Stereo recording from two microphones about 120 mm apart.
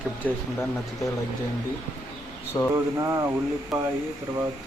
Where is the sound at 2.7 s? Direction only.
25° right (ahead or behind).